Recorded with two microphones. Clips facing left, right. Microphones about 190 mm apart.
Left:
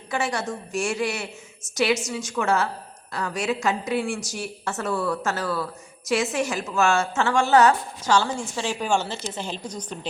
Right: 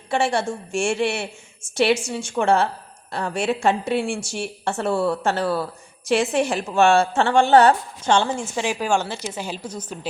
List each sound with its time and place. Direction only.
0.1 s a woman's voice: 30° right (ahead or behind)
8.5 s a woman's voice: 15° right (ahead or behind)